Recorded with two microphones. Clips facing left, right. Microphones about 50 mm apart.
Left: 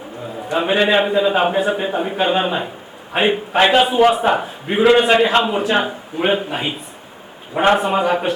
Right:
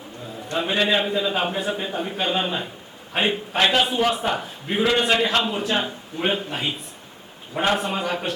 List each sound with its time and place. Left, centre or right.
0.4 s a man's voice: centre